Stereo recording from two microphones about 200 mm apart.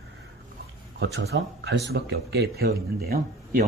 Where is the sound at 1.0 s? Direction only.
55° right (ahead or behind).